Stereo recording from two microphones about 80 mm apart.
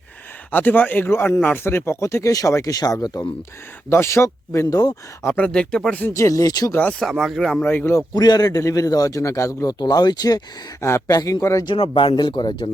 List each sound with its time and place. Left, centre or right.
0.5 s speech: left
3.8 s speech: left
5.2 s speech: centre
6.1 s a man's voice: left
7.0 s speech: centre
7.6 s speech: left
8.1 s a man's voice: left
9.7 s speech: left
10.8 s speech: left
11.1 s a man's voice: left
11.6 s speech: left